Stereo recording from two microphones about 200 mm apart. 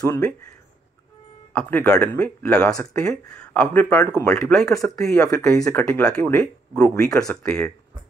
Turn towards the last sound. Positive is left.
turn(degrees=5)  # may be behind; listen again after turning